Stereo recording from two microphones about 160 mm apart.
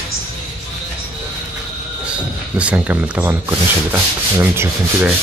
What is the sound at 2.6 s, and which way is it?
Sanding, 10° right (ahead or behind).